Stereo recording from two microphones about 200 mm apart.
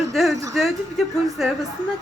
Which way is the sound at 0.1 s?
Centre (ahead or behind).